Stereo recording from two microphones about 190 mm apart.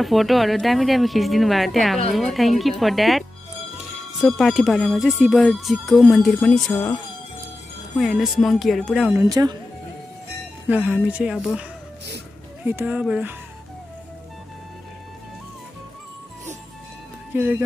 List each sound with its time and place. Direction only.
0.0 s speech: centre (ahead or behind)
8.0 s speech: centre (ahead or behind)
9.1 s speech: 20° right (ahead or behind)
10.7 s speech: 5° right (ahead or behind)
12.6 s speech: 10° right (ahead or behind)
17.3 s speech: 10° right (ahead or behind)